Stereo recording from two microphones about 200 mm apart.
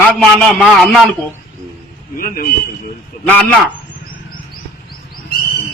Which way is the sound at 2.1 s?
45° left (ahead or behind).